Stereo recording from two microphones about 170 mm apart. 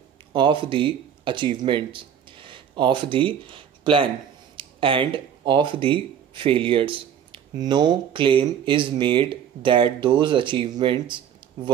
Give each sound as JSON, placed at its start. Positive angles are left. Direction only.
{"t": 0.3, "sound": "speech", "side_deg": -30}